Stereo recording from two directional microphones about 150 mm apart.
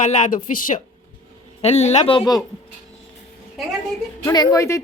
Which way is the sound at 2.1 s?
25° left (ahead or behind).